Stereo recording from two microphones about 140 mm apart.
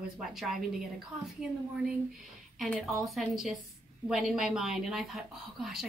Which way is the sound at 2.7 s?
Centre (ahead or behind).